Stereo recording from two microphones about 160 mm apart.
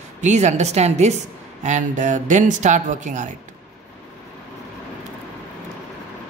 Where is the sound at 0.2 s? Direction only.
50° right (ahead or behind).